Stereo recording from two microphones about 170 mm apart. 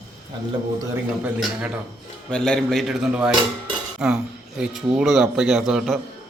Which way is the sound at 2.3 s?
5° left (ahead or behind).